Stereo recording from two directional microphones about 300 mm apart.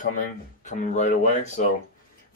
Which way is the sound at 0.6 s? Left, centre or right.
Left.